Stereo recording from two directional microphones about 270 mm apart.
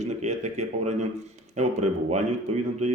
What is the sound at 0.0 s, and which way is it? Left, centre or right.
A man's voice, right.